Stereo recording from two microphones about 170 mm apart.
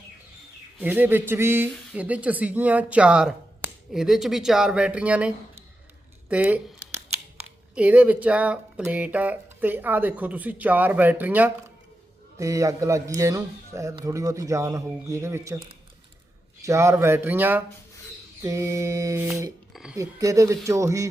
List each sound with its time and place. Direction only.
0.8 s speech: 10° right (ahead or behind)
6.2 s a sound: 10° right (ahead or behind)
7.8 s speech: 10° right (ahead or behind)
16.6 s speech: 15° right (ahead or behind)
19.7 s a sound: 5° right (ahead or behind)
20.0 s speech: 20° right (ahead or behind)